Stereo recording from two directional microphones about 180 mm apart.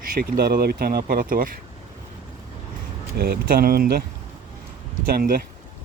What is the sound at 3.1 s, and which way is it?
Speech, 60° right (ahead or behind).